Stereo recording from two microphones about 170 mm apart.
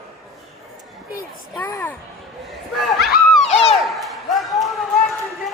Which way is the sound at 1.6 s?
20° left (ahead or behind).